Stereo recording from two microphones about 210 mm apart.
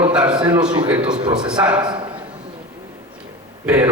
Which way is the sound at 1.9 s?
20° right (ahead or behind).